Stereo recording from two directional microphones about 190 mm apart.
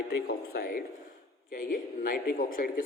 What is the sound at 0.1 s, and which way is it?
Speech, 50° left (ahead or behind).